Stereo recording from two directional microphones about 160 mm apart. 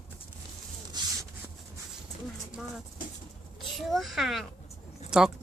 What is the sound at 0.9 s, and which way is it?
Rub, 25° right (ahead or behind).